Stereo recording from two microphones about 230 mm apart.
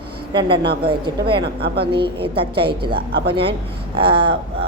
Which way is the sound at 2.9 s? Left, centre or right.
Right.